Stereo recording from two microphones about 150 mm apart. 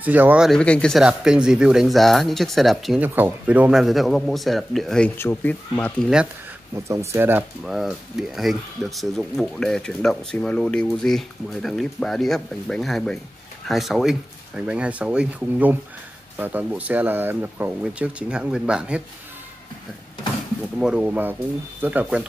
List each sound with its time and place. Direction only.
0.0 s speech: 10° right (ahead or behind)
0.5 s speech: 5° left (ahead or behind)
1.0 s speech: 5° right (ahead or behind)
3.0 s speech: 10° right (ahead or behind); by 5.1 s 5° left (ahead or behind)
5.1 s speech: 15° left (ahead or behind)
6.7 s speech: 20° right (ahead or behind)
7.6 s speech: 5° right (ahead or behind)
20.8 s speech: 5° right (ahead or behind)